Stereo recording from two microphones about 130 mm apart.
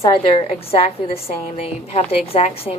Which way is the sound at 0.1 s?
45° left (ahead or behind).